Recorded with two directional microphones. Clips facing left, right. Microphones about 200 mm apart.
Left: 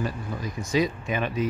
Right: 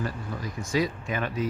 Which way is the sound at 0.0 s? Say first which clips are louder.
Left 2 dB; 20° left (ahead or behind).